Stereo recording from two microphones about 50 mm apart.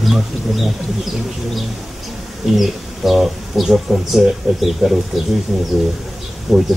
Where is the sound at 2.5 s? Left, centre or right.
Centre.